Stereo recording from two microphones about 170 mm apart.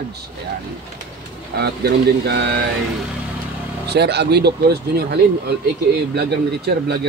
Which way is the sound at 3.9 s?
80° right.